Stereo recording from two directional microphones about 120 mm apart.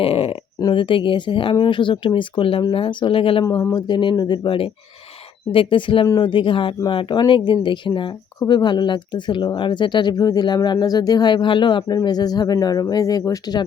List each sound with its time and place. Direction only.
0.0 s a sound: 50° left (ahead or behind)
0.6 s speech: 45° left (ahead or behind)
3.4 s speech: 25° left (ahead or behind)
3.8 s speech: 40° left (ahead or behind)